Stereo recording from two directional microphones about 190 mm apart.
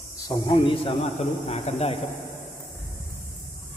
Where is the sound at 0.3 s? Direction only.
15° left (ahead or behind).